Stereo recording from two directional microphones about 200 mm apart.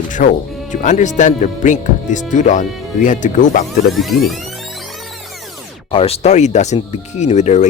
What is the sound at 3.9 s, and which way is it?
Music, centre (ahead or behind).